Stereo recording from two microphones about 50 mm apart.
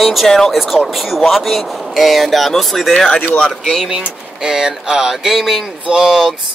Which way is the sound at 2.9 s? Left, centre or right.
Centre.